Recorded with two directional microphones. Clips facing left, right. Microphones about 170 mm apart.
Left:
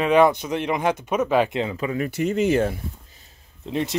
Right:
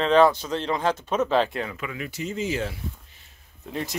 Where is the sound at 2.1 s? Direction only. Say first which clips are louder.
Left 8 dB; 60° left (ahead or behind).